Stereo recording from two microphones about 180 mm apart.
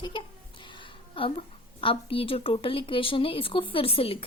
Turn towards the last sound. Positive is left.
turn(degrees=30)  # may be behind; listen again after turning